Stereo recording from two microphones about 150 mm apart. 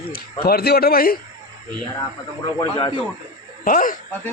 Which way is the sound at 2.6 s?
30° left (ahead or behind).